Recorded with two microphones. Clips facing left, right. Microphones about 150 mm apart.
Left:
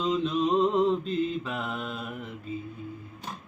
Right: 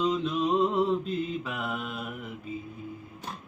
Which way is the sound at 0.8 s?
10° right (ahead or behind).